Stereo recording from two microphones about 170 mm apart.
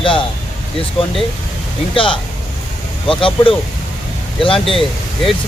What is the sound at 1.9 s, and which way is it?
Speech, 30° left (ahead or behind).